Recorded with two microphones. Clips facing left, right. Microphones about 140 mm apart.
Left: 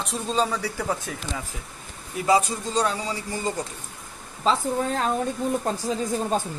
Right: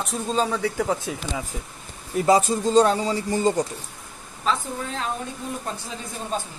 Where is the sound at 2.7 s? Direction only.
30° right (ahead or behind).